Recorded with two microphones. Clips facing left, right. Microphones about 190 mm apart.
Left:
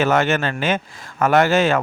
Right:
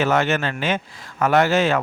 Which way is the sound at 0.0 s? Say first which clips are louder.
Left 2 dB; 50° left (ahead or behind).